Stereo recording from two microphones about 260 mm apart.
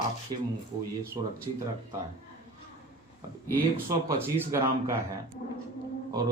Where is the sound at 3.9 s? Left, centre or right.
Centre.